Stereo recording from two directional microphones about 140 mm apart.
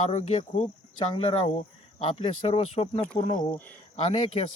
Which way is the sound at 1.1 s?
45° left (ahead or behind).